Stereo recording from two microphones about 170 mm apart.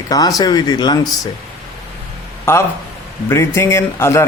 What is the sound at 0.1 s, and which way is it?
Speech, 20° left (ahead or behind).